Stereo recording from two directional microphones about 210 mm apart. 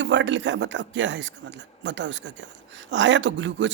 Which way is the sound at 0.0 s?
60° right (ahead or behind).